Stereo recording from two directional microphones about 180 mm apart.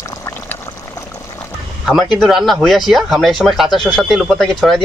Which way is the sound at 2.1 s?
Centre (ahead or behind).